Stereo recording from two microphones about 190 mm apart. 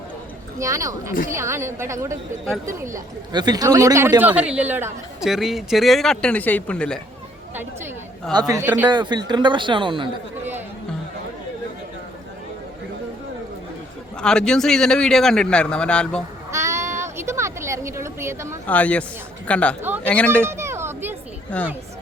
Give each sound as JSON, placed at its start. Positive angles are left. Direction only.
{"t": 0.6, "sound": "a man's voice", "side_deg": -15}
{"t": 8.3, "sound": "a man's voice", "side_deg": -20}
{"t": 8.9, "sound": "speech", "side_deg": -20}
{"t": 14.2, "sound": "a man's voice", "side_deg": 5}
{"t": 16.5, "sound": "a sound", "side_deg": -15}
{"t": 18.6, "sound": "speech", "side_deg": 10}
{"t": 20.4, "sound": "a sound", "side_deg": -15}
{"t": 21.5, "sound": "speech", "side_deg": 5}